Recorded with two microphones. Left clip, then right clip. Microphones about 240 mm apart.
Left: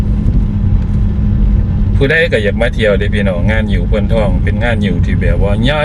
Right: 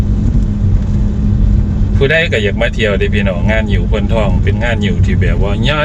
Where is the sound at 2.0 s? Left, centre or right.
Centre.